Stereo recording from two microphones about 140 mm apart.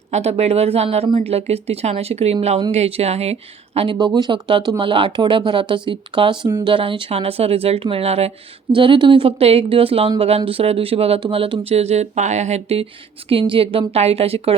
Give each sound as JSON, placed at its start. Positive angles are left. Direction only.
{"t": 0.1, "sound": "speech", "side_deg": -50}
{"t": 3.9, "sound": "speech", "side_deg": -30}